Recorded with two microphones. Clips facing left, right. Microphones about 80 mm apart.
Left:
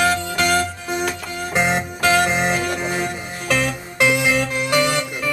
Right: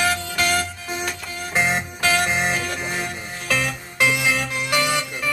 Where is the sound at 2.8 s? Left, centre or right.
Centre.